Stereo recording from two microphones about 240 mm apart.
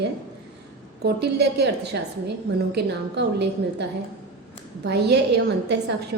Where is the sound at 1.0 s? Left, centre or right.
Right.